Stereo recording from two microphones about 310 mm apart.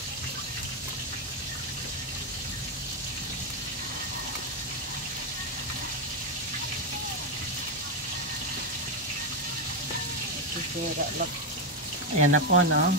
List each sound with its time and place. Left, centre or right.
12.2 s speech: right